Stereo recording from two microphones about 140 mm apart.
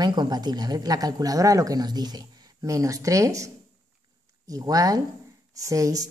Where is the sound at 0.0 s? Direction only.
30° right (ahead or behind).